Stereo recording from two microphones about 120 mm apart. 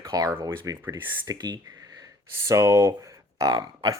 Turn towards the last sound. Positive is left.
turn(degrees=-30)  # may be behind; listen again after turning